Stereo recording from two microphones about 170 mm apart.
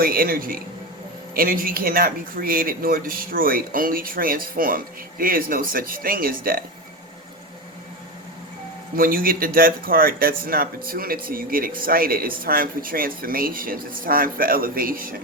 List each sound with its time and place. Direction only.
0.0 s speech: 60° right (ahead or behind)
9.0 s speech: 60° right (ahead or behind)